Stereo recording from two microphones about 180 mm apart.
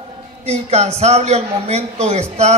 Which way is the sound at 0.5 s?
35° right (ahead or behind).